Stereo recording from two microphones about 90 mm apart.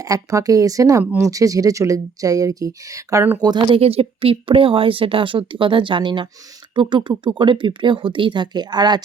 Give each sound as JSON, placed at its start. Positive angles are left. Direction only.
{"t": 0.0, "sound": "speech", "side_deg": -40}
{"t": 3.7, "sound": "speech", "side_deg": -90}